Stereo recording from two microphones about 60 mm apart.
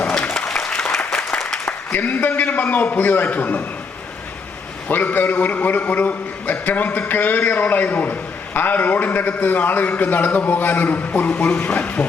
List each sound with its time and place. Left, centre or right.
0.3 s applause: centre
1.5 s a man's voice: left
4.9 s a man's voice: left